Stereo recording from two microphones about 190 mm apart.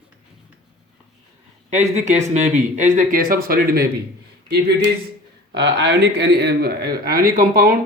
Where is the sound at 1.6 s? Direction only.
35° right (ahead or behind); by 3.9 s 55° right (ahead or behind).